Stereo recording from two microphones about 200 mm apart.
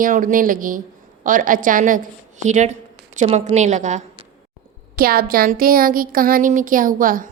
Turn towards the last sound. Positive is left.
turn(degrees=-45)  # may be behind; listen again after turning